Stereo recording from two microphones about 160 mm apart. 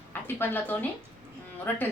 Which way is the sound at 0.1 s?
15° left (ahead or behind).